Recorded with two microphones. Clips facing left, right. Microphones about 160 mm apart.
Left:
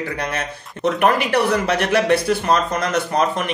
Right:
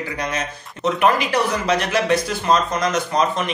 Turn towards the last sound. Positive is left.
turn(degrees=60)  # may be behind; listen again after turning